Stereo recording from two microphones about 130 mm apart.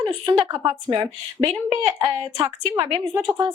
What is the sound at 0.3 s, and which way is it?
A woman's voice, 35° right (ahead or behind).